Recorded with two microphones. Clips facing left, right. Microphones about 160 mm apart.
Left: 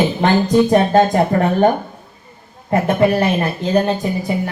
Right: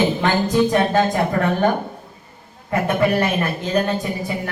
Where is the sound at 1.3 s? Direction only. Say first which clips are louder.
Left 4 dB; 45° left (ahead or behind).